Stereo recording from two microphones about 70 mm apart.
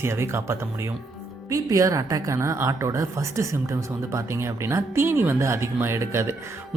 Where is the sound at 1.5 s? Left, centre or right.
Right.